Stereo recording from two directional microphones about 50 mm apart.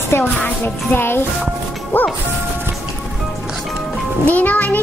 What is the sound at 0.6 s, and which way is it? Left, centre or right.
A child's voice, left.